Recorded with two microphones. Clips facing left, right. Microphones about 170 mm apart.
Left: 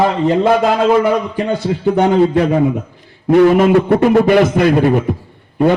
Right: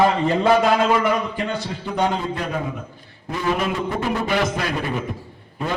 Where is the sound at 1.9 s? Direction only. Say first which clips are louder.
Left 11 dB; 70° left (ahead or behind).